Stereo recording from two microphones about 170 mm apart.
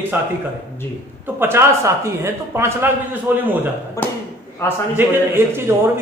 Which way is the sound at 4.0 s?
15° left (ahead or behind).